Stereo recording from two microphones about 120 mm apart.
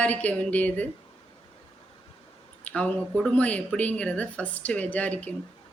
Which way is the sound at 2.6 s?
10° left (ahead or behind).